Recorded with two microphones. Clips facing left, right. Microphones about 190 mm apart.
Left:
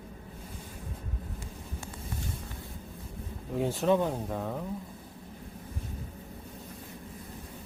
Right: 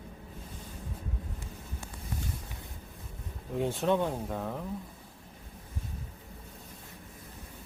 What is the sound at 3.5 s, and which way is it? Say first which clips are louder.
Speech: left 2 dB; centre (ahead or behind).